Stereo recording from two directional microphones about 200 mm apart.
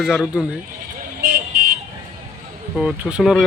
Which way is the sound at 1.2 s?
45° right (ahead or behind).